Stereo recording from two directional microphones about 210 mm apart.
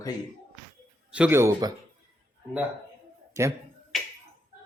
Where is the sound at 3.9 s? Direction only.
Centre (ahead or behind).